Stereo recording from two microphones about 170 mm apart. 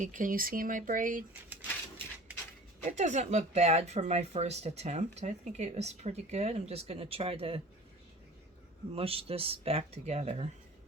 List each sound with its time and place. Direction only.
0.0 s speech: 50° right (ahead or behind)
2.8 s speech: 45° right (ahead or behind)
8.9 s speech: 35° right (ahead or behind)